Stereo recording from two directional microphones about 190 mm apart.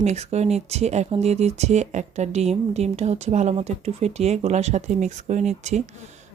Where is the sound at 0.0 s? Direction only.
35° right (ahead or behind).